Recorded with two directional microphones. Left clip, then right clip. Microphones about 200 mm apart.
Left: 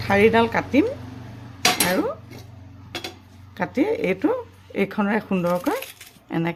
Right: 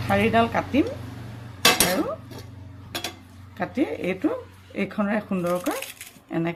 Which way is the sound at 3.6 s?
55° left (ahead or behind).